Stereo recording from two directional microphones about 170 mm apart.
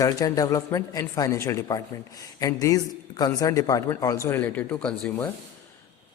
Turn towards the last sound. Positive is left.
turn(degrees=10)  # may be behind; listen again after turning